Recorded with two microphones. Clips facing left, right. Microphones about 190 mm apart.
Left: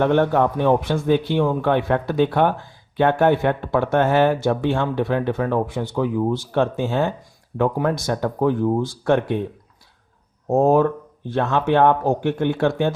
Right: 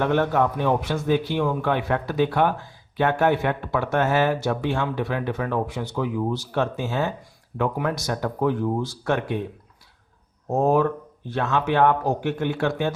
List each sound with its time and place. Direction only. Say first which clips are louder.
0.0 s speech: left 4 dB; 55° left (ahead or behind)
7.5 s speech: left 4 dB; 45° left (ahead or behind)
10.5 s speech: left 4 dB; 50° left (ahead or behind)